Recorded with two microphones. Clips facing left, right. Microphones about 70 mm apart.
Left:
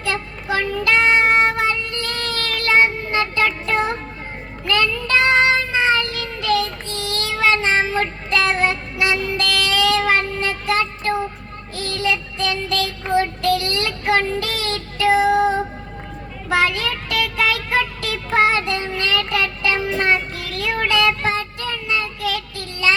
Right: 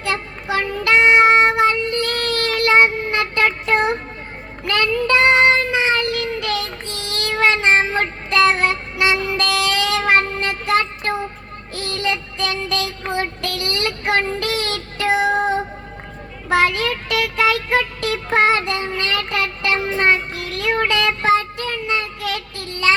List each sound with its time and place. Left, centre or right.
0.0 s child singing: right